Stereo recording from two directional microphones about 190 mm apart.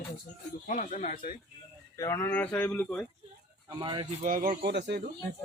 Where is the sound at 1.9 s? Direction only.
15° left (ahead or behind).